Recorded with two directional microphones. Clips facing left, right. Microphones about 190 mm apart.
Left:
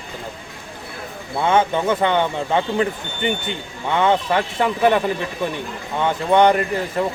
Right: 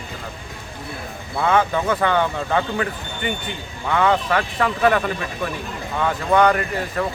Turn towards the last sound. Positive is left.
turn(degrees=25)  # may be behind; listen again after turning